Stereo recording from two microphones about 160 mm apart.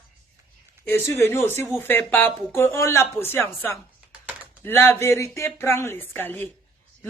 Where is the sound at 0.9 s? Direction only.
15° left (ahead or behind).